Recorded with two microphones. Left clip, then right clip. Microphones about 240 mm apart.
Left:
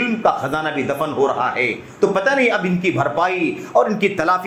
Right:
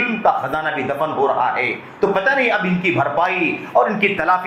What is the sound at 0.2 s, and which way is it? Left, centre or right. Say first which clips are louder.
A man's voice: even; left.